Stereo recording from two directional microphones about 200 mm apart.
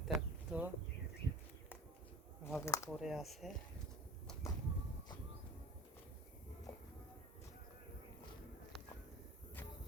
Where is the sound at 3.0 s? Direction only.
Centre (ahead or behind).